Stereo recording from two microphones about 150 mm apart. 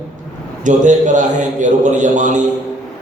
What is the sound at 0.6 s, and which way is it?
Mantra, 55° right (ahead or behind).